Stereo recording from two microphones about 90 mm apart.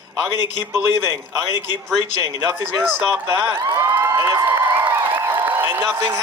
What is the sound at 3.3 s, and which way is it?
Speech, 35° right (ahead or behind).